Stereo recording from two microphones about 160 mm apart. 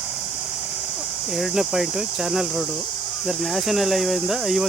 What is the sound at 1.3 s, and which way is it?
Speech, centre (ahead or behind).